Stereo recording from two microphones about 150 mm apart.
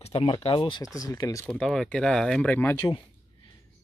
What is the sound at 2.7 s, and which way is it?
Speech, 30° left (ahead or behind).